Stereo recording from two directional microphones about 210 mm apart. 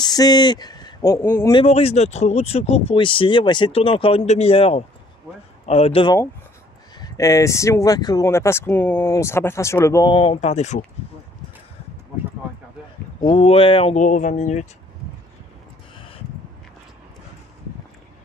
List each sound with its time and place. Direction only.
0.0 s speech: 20° left (ahead or behind)
1.5 s speech: 25° left (ahead or behind)
7.0 s speech: 15° left (ahead or behind); by 10.8 s 35° left (ahead or behind)
13.3 s speech: 30° left (ahead or behind)